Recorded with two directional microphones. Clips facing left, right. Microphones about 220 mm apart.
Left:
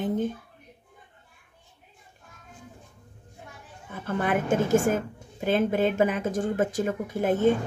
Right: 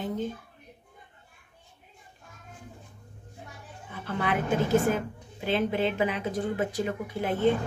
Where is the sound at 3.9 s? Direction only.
45° left (ahead or behind).